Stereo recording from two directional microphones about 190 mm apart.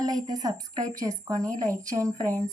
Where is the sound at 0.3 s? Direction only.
20° right (ahead or behind).